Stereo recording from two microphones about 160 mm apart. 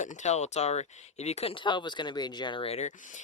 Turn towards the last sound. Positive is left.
turn(degrees=50)  # may be behind; listen again after turning